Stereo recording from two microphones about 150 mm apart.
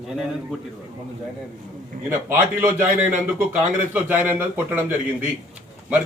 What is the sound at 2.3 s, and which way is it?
A man's voice, 15° right (ahead or behind).